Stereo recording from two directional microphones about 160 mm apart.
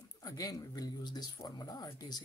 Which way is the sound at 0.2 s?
20° left (ahead or behind).